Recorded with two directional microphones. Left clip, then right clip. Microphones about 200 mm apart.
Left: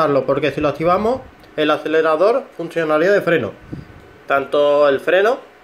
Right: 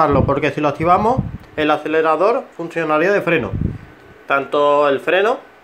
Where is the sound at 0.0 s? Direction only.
20° right (ahead or behind).